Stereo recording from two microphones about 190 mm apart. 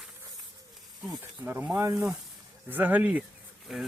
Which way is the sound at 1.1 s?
10° right (ahead or behind).